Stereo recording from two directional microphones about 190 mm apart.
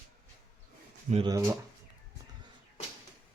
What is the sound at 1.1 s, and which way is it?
Speech, 25° right (ahead or behind).